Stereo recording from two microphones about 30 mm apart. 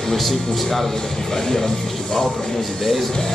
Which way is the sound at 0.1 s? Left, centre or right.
Centre.